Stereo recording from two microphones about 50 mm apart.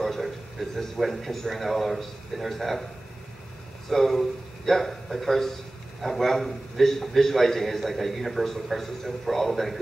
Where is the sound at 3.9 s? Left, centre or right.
Centre.